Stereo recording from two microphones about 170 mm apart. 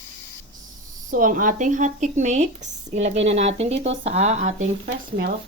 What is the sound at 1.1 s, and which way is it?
Speech, 50° right (ahead or behind).